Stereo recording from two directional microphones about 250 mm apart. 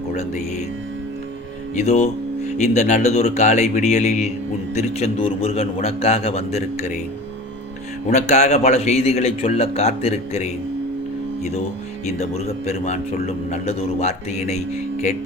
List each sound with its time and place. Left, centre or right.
1.7 s a man's voice: left
8.1 s a man's voice: left
12.0 s a man's voice: left